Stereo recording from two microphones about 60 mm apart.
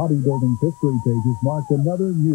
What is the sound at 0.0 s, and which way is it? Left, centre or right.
Speech, centre.